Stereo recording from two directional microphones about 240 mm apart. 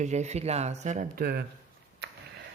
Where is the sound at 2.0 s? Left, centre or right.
Right.